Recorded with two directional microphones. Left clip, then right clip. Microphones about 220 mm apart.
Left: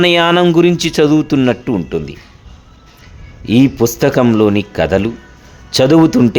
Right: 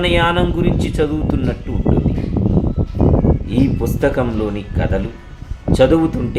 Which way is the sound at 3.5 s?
45° left (ahead or behind).